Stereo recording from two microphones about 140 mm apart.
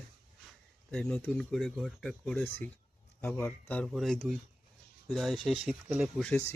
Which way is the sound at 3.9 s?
Centre (ahead or behind).